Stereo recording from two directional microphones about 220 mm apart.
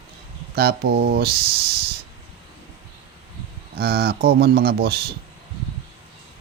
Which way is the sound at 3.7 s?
45° right (ahead or behind).